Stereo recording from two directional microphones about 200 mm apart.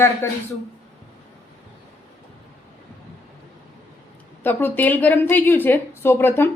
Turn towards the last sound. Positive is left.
turn(degrees=10)  # may be behind; listen again after turning